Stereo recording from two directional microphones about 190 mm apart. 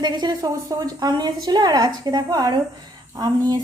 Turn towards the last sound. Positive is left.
turn(degrees=-20)  # may be behind; listen again after turning